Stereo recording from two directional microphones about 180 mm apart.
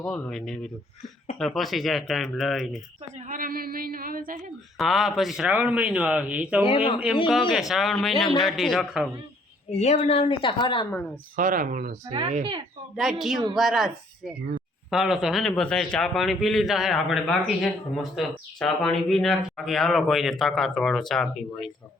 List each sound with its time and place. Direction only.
0.0 s a man's voice: 5° left (ahead or behind)
3.2 s speech: 50° right (ahead or behind)
4.8 s a man's voice: centre (ahead or behind)
6.6 s speech: 30° left (ahead or behind)
7.3 s a man's voice: centre (ahead or behind)
9.6 s speech: 40° left (ahead or behind)
11.3 s speech: 50° right (ahead or behind)
12.3 s speech: 30° right (ahead or behind)
13.0 s a man's voice: centre (ahead or behind)